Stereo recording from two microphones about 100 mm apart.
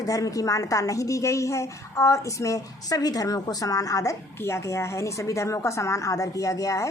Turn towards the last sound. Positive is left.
turn(degrees=35)  # may be behind; listen again after turning